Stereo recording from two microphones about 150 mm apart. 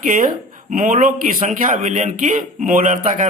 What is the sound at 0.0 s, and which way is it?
Speech, 60° right (ahead or behind).